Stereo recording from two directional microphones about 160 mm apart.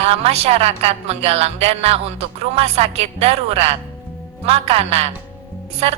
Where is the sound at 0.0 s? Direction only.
40° right (ahead or behind).